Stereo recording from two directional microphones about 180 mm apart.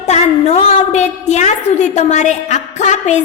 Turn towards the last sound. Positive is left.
turn(degrees=40)  # may be behind; listen again after turning